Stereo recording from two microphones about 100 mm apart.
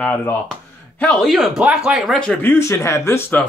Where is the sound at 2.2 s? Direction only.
15° left (ahead or behind).